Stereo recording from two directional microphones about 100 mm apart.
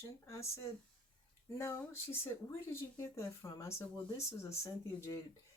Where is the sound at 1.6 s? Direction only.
25° left (ahead or behind).